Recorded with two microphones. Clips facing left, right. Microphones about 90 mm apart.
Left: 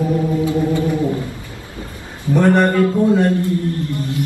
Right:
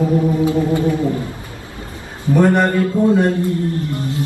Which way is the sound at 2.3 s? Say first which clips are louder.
Even; 15° right (ahead or behind).